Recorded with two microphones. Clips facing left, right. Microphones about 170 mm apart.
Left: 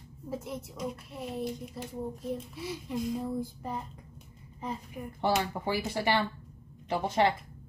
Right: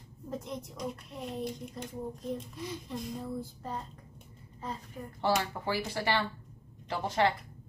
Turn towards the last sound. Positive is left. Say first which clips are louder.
# left 2 dB
turn(degrees=20)  # may be behind; listen again after turning